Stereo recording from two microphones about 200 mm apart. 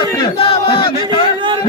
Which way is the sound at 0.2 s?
25° left (ahead or behind).